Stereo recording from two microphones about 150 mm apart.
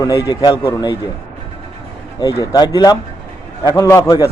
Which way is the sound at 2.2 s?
25° left (ahead or behind).